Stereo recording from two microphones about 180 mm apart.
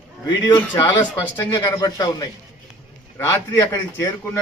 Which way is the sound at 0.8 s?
25° left (ahead or behind).